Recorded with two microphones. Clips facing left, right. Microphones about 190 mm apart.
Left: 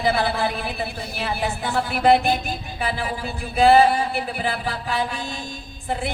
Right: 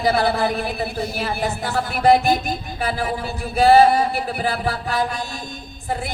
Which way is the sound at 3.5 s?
40° right (ahead or behind).